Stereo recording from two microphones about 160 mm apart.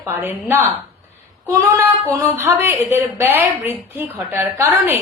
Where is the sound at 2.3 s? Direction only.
15° right (ahead or behind).